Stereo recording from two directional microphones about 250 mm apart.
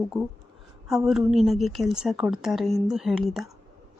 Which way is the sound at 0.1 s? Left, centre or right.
Centre.